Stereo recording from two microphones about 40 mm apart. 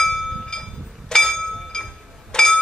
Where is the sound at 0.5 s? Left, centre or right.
Centre.